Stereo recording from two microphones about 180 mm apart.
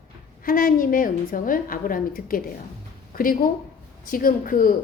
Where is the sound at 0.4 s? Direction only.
50° left (ahead or behind).